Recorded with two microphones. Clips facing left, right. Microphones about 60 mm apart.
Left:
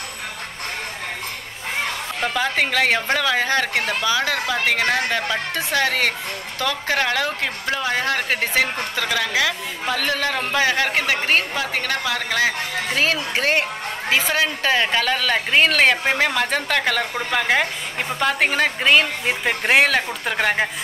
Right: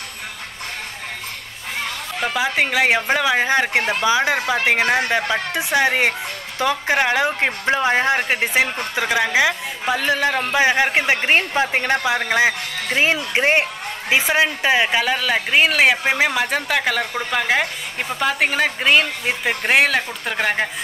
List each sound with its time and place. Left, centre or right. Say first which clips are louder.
2.2 s a woman's voice: right 1 dB; centre
4.4 s a woman's voice: right 3 dB; centre